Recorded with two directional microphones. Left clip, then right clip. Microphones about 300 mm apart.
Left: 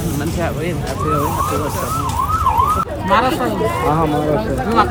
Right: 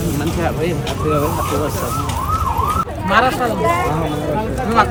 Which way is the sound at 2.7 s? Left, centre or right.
Centre.